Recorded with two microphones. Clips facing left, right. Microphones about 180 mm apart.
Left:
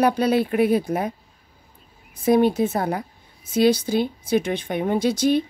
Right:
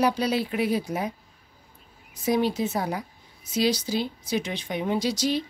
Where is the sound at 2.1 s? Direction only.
55° left (ahead or behind).